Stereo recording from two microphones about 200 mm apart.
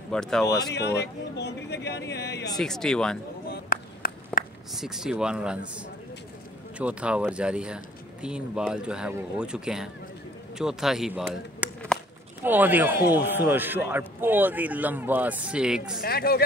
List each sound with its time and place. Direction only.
0.1 s speech: 5° left (ahead or behind)
0.6 s speech: 55° left (ahead or behind)
2.5 s speech: centre (ahead or behind)
3.4 s a sound: 45° left (ahead or behind)
4.7 s speech: centre (ahead or behind)
6.8 s a man's voice: 5° right (ahead or behind)
16.0 s speech: 50° left (ahead or behind)